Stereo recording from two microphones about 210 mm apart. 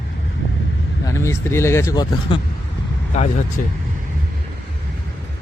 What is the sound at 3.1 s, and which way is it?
Speech, 35° left (ahead or behind).